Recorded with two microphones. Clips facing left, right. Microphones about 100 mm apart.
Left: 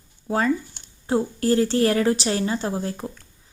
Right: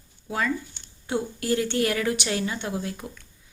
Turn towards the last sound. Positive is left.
turn(degrees=35)  # may be behind; listen again after turning